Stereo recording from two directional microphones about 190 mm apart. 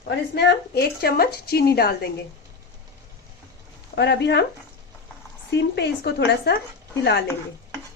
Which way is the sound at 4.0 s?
65° left (ahead or behind).